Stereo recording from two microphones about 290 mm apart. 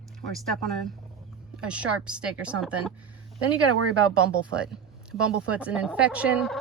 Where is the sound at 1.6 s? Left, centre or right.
Centre.